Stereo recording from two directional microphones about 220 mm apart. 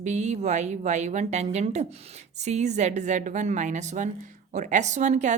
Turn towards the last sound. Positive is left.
turn(degrees=-30)  # may be behind; listen again after turning